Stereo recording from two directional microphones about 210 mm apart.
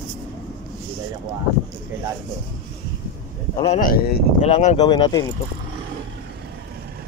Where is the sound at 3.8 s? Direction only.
45° left (ahead or behind).